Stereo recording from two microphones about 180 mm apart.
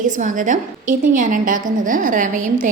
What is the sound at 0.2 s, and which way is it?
A woman's voice, 45° right (ahead or behind).